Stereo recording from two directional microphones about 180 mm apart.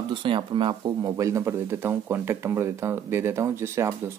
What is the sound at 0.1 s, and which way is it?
Speech, 25° right (ahead or behind).